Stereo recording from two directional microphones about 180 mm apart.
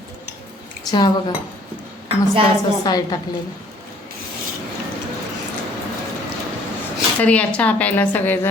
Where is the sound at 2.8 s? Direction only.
20° left (ahead or behind).